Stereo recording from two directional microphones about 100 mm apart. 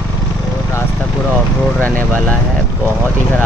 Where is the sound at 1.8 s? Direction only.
15° left (ahead or behind).